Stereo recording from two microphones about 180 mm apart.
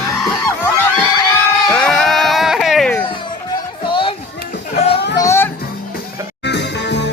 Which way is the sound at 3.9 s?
30° left (ahead or behind).